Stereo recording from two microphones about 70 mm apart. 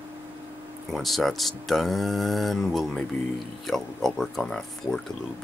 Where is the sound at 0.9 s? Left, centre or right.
Centre.